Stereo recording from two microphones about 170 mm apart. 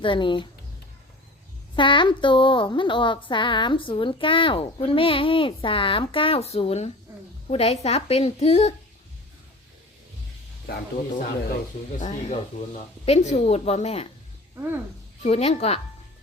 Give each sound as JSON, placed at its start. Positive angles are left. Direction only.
{"t": 0.0, "sound": "speech", "side_deg": 30}
{"t": 1.7, "sound": "a woman's voice", "side_deg": 30}
{"t": 11.9, "sound": "a woman's voice", "side_deg": 45}
{"t": 14.5, "sound": "speech", "side_deg": -15}
{"t": 15.2, "sound": "a woman's voice", "side_deg": 35}